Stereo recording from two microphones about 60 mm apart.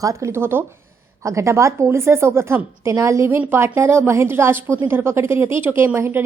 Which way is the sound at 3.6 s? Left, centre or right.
Right.